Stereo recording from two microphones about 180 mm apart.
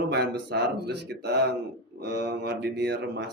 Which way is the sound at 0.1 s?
70° right (ahead or behind).